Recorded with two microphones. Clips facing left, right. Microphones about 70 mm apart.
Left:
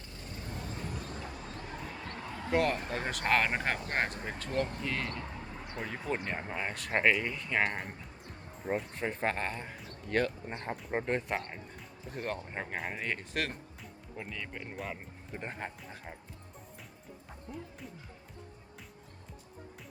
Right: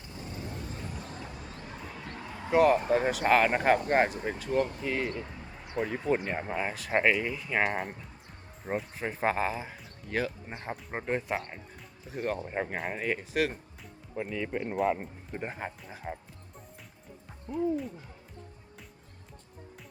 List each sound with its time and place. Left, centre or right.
2.3 s a sound: centre
2.6 s speech: centre
5.7 s speech: centre
14.2 s speech: centre
15.3 s speech: centre
17.5 s speech: centre